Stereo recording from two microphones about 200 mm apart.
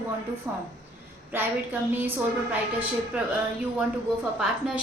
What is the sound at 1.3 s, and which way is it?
A woman's voice, 10° right (ahead or behind).